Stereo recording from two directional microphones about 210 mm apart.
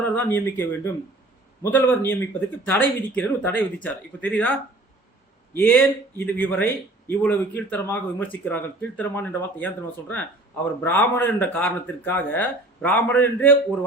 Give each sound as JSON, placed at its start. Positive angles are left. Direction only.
{"t": 0.0, "sound": "a man's voice", "side_deg": 10}
{"t": 5.5, "sound": "a man's voice", "side_deg": 10}